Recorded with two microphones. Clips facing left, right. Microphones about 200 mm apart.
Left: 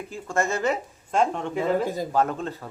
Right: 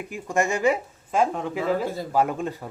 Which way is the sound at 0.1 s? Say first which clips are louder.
Right 2 dB; 15° right (ahead or behind).